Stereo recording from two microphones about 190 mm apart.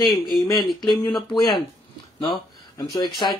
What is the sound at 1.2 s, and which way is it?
Speech, 25° left (ahead or behind).